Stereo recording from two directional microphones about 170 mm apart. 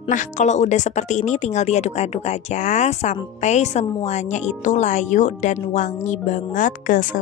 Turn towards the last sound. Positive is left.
turn(degrees=50)  # may be behind; listen again after turning